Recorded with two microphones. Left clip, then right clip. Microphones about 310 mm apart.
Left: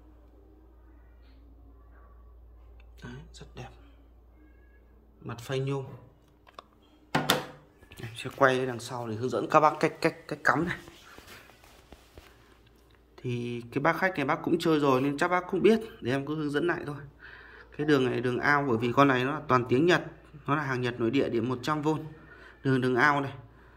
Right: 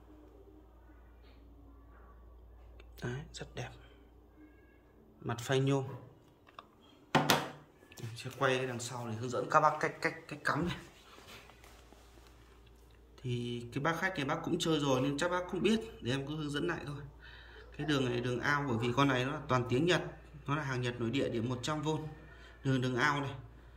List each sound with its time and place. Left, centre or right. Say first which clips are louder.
3.0 s speech: right 4 dB; centre
5.2 s a man's voice: right 1 dB; centre
8.4 s speech: left 8 dB; centre
13.1 s speech: left 5 dB; centre